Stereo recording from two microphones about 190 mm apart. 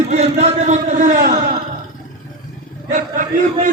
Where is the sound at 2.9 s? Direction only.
45° right (ahead or behind).